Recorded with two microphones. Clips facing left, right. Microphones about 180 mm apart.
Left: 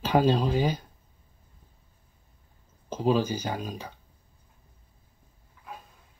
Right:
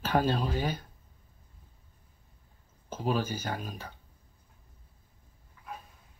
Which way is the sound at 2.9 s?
15° left (ahead or behind).